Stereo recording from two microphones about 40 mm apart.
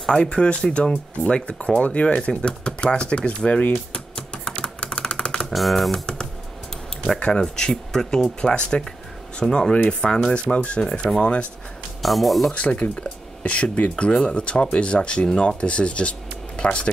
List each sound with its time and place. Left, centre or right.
0.1 s speech: left
3.9 s typing: left
4.6 s typewriter: left
5.5 s speech: centre
7.2 s speech: left
8.4 s speech: left
12.0 s speech: centre
12.5 s speech: left